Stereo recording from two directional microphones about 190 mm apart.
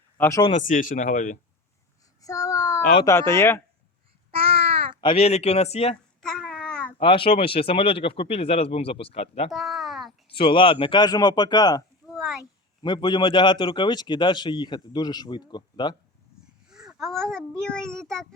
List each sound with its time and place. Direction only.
0.2 s speech: 15° left (ahead or behind)
0.4 s speech: 40° left (ahead or behind)
2.2 s child singing: 15° left (ahead or behind)
3.0 s speech: 15° left (ahead or behind)
4.3 s babbling: 30° right (ahead or behind)
4.9 s speech: 30° left (ahead or behind)
6.2 s babbling: centre (ahead or behind)
7.0 s speech: 25° left (ahead or behind)
9.5 s a sound: centre (ahead or behind)
10.2 s speech: 25° left (ahead or behind)
12.1 s a sound: centre (ahead or behind)
12.8 s speech: 25° left (ahead or behind)
16.6 s babbling: 5° right (ahead or behind)
17.6 s a child's voice: 5° left (ahead or behind)